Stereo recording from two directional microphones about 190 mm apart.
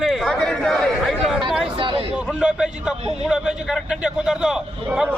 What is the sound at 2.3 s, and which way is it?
A man's voice, 5° right (ahead or behind).